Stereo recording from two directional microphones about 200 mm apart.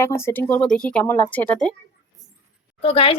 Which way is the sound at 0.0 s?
10° left (ahead or behind).